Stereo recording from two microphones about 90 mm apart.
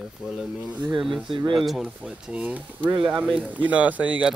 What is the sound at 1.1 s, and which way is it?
Speech, 75° right (ahead or behind).